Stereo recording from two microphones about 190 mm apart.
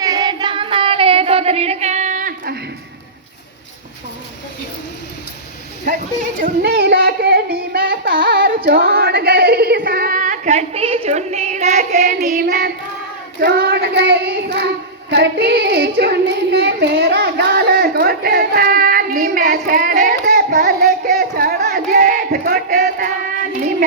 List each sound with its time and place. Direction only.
0.0 s child singing: 20° right (ahead or behind); by 2.6 s 50° right (ahead or behind)
6.6 s child singing: 60° right (ahead or behind); by 21.1 s 45° right (ahead or behind)
21.2 s a sound: 45° right (ahead or behind)